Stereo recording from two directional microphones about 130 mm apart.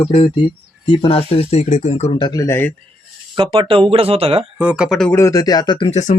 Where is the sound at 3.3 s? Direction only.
40° right (ahead or behind).